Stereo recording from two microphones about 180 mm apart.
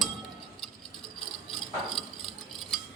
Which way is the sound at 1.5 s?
Centre (ahead or behind).